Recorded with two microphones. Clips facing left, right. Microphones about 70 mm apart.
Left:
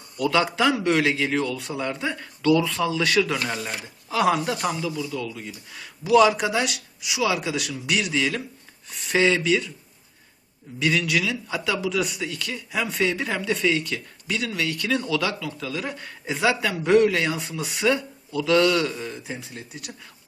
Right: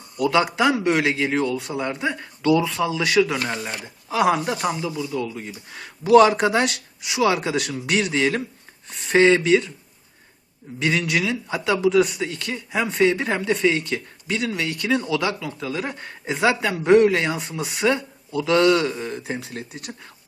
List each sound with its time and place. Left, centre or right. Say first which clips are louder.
0.2 s speech: right 2 dB; centre
4.1 s a man's voice: right 2 dB; centre
5.1 s a man's voice: right 4 dB; right
5.6 s a man's voice: right 5 dB; right
10.8 s a man's voice: right 1 dB; right
19.1 s speech: right 5 dB; right